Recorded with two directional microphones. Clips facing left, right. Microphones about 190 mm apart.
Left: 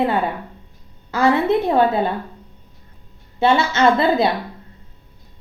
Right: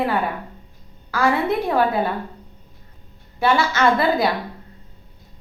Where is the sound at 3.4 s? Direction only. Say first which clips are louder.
Left 2 dB; 25° left (ahead or behind).